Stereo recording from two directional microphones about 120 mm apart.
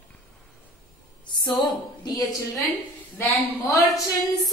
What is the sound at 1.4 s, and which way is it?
A woman's voice, 35° left (ahead or behind).